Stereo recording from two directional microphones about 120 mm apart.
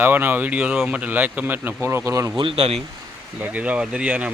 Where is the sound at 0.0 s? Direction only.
15° right (ahead or behind).